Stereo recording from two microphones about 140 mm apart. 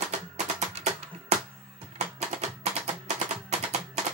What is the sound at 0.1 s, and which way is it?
Music, 55° right (ahead or behind).